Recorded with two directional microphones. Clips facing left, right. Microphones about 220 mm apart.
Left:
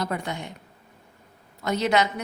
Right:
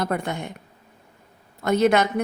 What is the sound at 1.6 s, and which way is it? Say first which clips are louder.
Speech: right 5 dB; 55° right (ahead or behind).